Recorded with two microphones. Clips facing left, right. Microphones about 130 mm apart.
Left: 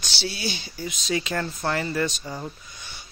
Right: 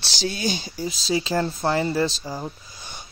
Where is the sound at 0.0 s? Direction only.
40° right (ahead or behind).